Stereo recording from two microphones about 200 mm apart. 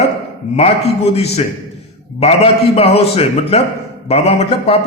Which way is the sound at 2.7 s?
30° left (ahead or behind).